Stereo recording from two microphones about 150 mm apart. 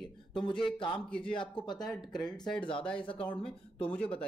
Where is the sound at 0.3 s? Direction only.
35° left (ahead or behind).